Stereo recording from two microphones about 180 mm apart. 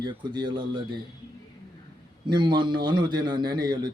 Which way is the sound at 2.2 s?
25° right (ahead or behind).